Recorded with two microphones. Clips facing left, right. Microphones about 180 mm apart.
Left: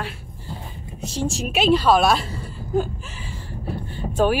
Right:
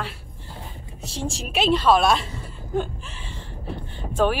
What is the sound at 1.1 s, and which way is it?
Speech, centre (ahead or behind).